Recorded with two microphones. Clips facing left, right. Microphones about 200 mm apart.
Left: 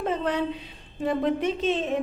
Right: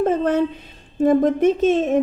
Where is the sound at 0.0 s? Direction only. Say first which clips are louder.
Right 8 dB; 45° right (ahead or behind).